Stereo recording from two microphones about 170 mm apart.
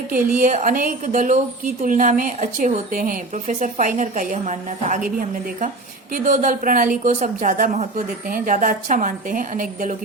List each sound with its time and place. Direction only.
0.3 s a woman's voice: 50° right (ahead or behind)
6.1 s a woman's voice: 50° right (ahead or behind)